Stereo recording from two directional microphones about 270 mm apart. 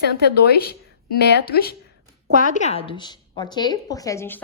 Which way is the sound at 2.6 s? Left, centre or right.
Left.